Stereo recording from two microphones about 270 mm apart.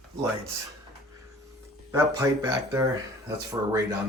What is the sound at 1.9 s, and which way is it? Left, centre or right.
Speech, centre.